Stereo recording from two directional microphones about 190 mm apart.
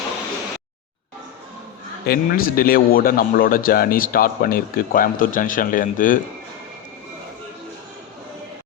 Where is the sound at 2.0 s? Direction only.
50° left (ahead or behind).